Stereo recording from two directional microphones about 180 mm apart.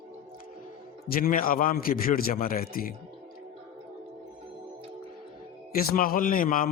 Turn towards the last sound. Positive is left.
turn(degrees=50)  # may be behind; listen again after turning